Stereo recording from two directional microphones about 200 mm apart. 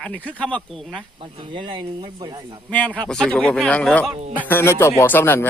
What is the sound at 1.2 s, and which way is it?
Speech, 25° right (ahead or behind).